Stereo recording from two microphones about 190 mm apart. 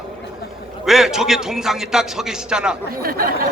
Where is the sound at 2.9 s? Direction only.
50° right (ahead or behind).